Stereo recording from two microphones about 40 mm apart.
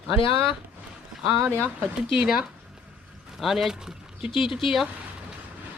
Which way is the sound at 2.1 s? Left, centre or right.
Centre.